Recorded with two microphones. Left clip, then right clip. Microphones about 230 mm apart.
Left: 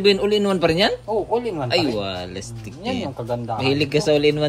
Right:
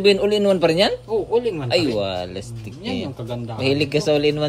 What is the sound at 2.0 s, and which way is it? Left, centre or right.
A man's voice, centre.